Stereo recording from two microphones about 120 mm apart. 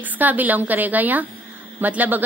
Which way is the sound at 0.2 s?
15° right (ahead or behind).